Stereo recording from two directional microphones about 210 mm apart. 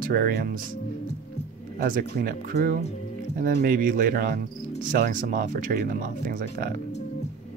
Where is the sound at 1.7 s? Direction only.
40° right (ahead or behind).